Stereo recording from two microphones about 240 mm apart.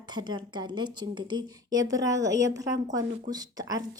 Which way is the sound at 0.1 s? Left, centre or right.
Centre.